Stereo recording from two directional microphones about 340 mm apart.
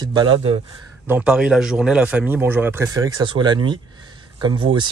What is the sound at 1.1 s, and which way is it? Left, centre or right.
A man's voice, centre.